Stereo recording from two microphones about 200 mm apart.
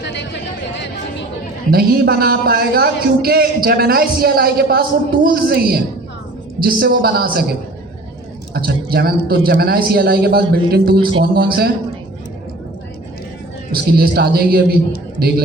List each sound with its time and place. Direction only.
0.0 s a sound: 60° left (ahead or behind)
1.7 s a man's voice: 50° right (ahead or behind)
8.5 s a man's voice: 50° right (ahead or behind)
13.7 s a man's voice: 50° right (ahead or behind)